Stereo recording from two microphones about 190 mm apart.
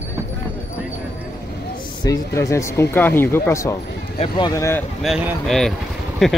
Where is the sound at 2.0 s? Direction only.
15° left (ahead or behind).